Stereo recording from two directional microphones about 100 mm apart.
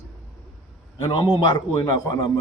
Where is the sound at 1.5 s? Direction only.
40° left (ahead or behind).